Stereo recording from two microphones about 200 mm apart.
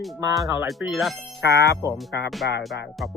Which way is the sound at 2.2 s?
Centre (ahead or behind).